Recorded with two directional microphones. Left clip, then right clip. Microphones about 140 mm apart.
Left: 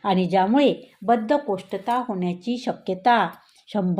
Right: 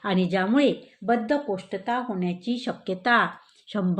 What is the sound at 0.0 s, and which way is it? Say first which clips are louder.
Speech: left 5 dB; 15° left (ahead or behind).